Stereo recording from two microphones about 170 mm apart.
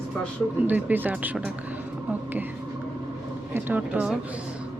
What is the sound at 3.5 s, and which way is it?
Speech, 10° right (ahead or behind).